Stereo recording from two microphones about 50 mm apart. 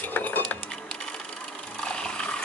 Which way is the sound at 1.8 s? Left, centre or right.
Centre.